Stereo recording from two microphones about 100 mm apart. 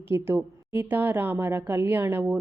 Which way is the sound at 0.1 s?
25° right (ahead or behind).